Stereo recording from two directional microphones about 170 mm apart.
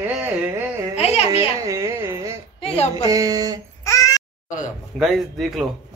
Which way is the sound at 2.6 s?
35° left (ahead or behind).